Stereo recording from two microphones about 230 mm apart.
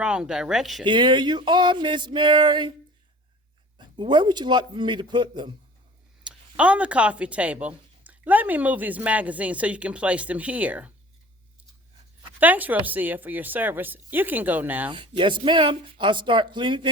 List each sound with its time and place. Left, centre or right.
0.0 s speech: centre
0.9 s speech: centre
3.8 s speech: centre
6.2 s speech: centre
12.4 s speech: centre
14.8 s speech: centre